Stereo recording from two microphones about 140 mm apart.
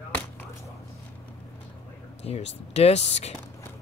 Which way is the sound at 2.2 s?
50° left (ahead or behind).